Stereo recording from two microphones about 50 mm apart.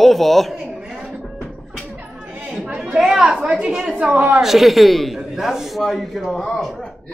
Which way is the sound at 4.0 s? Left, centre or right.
Right.